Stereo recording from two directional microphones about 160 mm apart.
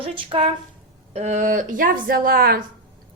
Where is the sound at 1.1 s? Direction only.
45° right (ahead or behind); by 2.6 s 70° right (ahead or behind).